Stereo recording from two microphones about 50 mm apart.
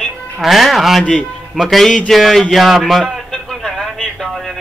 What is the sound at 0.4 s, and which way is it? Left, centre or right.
Speech, centre.